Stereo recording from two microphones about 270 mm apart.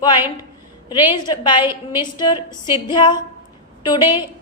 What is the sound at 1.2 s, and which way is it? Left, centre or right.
Speech, centre.